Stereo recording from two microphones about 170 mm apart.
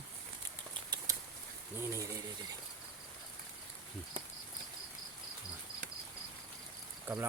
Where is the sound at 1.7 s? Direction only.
15° right (ahead or behind).